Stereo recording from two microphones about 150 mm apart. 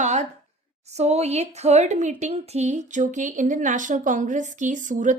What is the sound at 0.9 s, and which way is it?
Speech, 45° right (ahead or behind).